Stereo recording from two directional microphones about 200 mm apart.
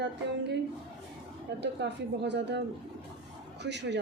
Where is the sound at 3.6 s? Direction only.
60° right (ahead or behind).